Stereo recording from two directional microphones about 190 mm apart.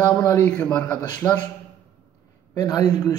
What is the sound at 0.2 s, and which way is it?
Speech, 10° left (ahead or behind).